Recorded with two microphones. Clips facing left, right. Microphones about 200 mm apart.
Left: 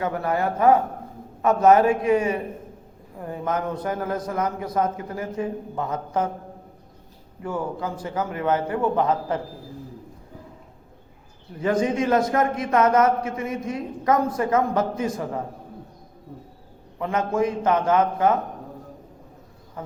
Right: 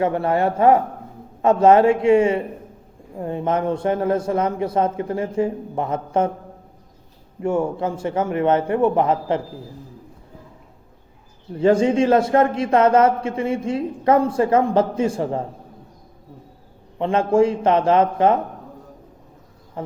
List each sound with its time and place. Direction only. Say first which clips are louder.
0.0 s a man's voice: right 5 dB; 30° right (ahead or behind)
7.4 s a man's voice: right 7 dB; 25° right (ahead or behind)
11.5 s a man's voice: right 6 dB; 30° right (ahead or behind)
17.0 s a man's voice: right 6 dB; 30° right (ahead or behind)
19.8 s speech: right 6 dB; 30° right (ahead or behind)